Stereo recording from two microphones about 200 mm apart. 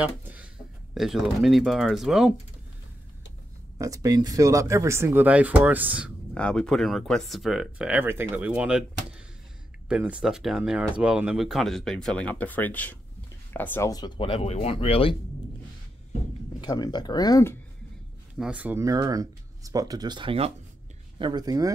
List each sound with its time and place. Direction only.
0.0 s a sound: 10° right (ahead or behind)
0.9 s speech: centre (ahead or behind)
3.7 s speech: 15° right (ahead or behind)
6.3 s speech: 5° left (ahead or behind); by 15.1 s 30° left (ahead or behind)
16.6 s speech: 20° left (ahead or behind)
18.4 s speech: 5° right (ahead or behind)